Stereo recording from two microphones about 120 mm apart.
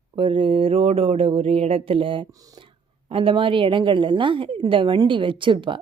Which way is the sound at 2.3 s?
30° right (ahead or behind).